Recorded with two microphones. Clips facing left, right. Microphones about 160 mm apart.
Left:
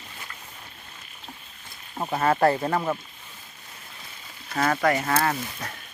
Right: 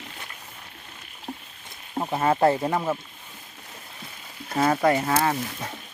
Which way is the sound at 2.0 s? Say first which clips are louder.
Even; 10° right (ahead or behind).